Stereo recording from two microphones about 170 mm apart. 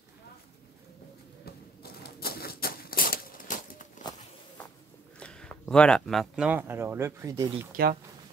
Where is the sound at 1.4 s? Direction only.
65° left (ahead or behind); by 3.8 s 50° left (ahead or behind).